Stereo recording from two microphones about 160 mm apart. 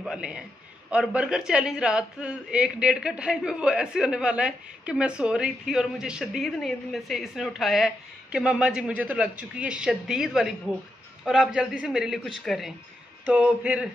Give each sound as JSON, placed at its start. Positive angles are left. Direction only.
{"t": 0.0, "sound": "a man's voice", "side_deg": -5}